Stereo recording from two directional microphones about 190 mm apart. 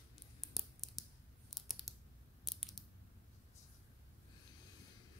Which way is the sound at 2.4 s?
Centre (ahead or behind).